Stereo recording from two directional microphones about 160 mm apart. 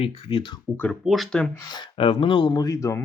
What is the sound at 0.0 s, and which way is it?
Speech, 35° left (ahead or behind).